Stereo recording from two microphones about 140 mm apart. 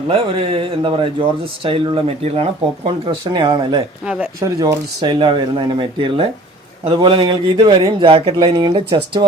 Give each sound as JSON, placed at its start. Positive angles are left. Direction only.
{"t": 0.6, "sound": "speech", "side_deg": -35}
{"t": 3.3, "sound": "speech", "side_deg": -35}
{"t": 4.0, "sound": "speech", "side_deg": -5}
{"t": 4.4, "sound": "speech", "side_deg": -20}
{"t": 4.9, "sound": "speech", "side_deg": -35}